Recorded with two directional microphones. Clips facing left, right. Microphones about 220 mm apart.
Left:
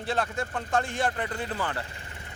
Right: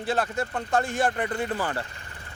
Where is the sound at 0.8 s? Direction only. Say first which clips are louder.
Right 3 dB; 45° right (ahead or behind).